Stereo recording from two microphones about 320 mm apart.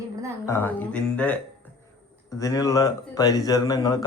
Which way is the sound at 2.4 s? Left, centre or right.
Centre.